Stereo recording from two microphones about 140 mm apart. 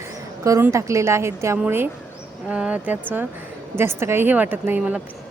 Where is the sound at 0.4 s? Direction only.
20° right (ahead or behind).